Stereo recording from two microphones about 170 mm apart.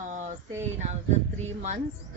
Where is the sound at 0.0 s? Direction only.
45° right (ahead or behind).